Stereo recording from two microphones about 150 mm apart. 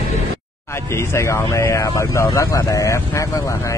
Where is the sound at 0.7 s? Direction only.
20° left (ahead or behind).